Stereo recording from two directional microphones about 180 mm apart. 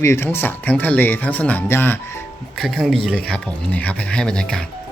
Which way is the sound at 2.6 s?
Centre (ahead or behind).